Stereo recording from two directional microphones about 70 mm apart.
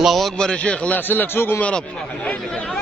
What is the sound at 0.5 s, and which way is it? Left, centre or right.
A man's voice, centre.